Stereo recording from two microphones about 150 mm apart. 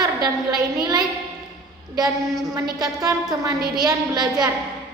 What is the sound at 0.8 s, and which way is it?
Speech, 30° right (ahead or behind).